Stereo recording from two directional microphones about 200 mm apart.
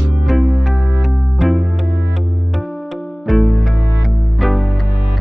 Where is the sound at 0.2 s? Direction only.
Centre (ahead or behind).